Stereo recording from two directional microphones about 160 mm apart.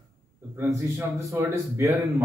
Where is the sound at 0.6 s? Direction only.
15° right (ahead or behind).